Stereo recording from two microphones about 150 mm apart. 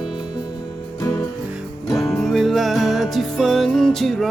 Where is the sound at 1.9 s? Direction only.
Centre (ahead or behind).